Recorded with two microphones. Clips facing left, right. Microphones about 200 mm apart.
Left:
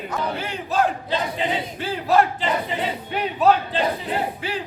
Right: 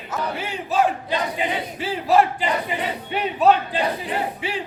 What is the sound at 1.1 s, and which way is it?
Battle cry, 10° right (ahead or behind).